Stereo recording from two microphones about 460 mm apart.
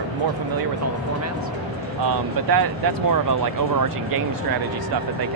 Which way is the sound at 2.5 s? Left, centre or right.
Right.